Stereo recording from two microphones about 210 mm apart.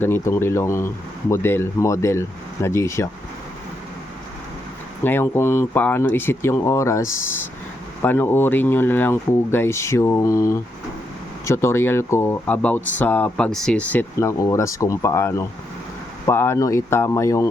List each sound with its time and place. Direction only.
0.0 s speech: 10° left (ahead or behind)
5.0 s speech: 10° left (ahead or behind)